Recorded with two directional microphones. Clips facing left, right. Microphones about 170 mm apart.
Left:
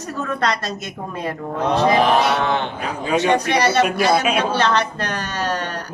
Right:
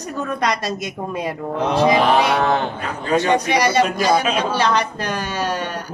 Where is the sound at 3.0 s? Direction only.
10° left (ahead or behind).